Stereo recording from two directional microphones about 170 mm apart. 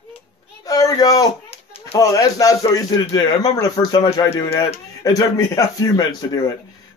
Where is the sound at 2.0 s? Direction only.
20° left (ahead or behind).